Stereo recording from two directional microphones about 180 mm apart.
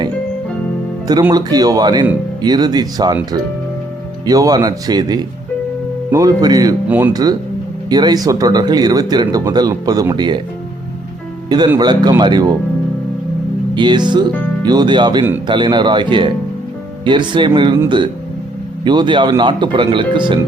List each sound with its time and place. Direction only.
1.3 s speech: 20° right (ahead or behind)
4.3 s speech: 20° right (ahead or behind)
6.8 s speech: 10° right (ahead or behind)
7.9 s speech: 20° right (ahead or behind)
11.4 s speech: 25° right (ahead or behind)
13.7 s speech: 25° right (ahead or behind)